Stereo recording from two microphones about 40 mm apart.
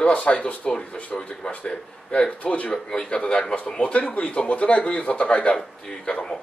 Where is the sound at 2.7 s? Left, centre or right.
Left.